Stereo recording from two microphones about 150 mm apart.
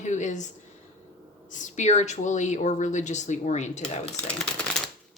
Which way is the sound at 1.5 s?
55° left (ahead or behind).